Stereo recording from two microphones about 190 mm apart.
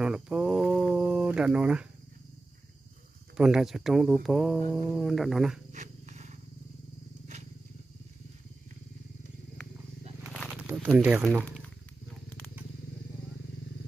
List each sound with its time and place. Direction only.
0.0 s a sound: 5° right (ahead or behind)
3.3 s speech: 5° right (ahead or behind)
5.0 s speech: centre (ahead or behind)
5.7 s wild animals: 40° right (ahead or behind)
10.3 s a sound: 5° right (ahead or behind)
11.0 s speech: 10° right (ahead or behind)